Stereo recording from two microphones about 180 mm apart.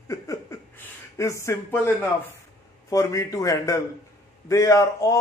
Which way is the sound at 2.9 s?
20° left (ahead or behind).